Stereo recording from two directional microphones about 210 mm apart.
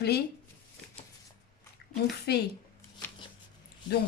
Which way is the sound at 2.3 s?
50° left (ahead or behind).